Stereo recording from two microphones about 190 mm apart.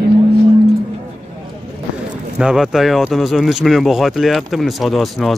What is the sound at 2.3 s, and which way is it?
Speech, 5° right (ahead or behind).